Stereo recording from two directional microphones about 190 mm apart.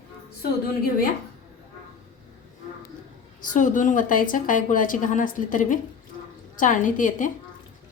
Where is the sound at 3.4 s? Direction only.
40° left (ahead or behind).